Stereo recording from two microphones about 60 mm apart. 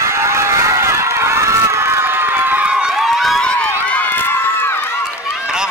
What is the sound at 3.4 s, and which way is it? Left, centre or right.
Run, centre.